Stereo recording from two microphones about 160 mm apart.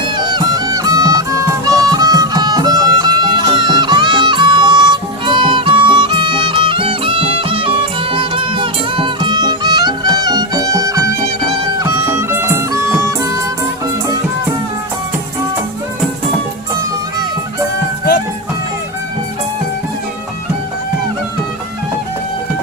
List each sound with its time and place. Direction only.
0.0 s music: 25° right (ahead or behind)